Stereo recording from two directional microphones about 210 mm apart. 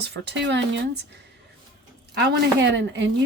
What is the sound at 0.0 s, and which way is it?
Speech, 55° right (ahead or behind).